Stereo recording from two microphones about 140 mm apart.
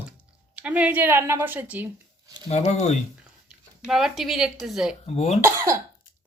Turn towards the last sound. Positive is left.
turn(degrees=-20)  # may be behind; listen again after turning